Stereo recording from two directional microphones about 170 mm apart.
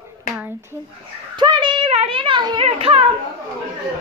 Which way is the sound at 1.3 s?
25° right (ahead or behind).